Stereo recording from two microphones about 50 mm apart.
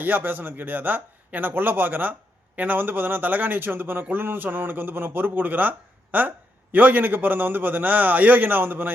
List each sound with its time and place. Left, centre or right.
0.0 s speech: right